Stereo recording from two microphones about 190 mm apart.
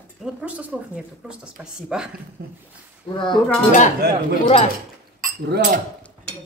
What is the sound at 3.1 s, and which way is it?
Speech, 25° left (ahead or behind).